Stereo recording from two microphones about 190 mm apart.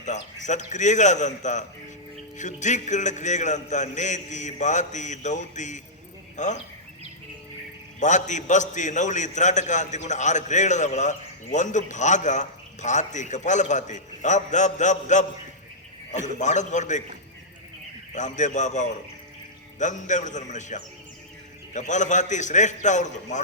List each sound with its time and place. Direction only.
0.0 s a man's voice: 40° left (ahead or behind)
7.9 s a man's voice: 40° left (ahead or behind)
18.1 s a man's voice: 40° left (ahead or behind)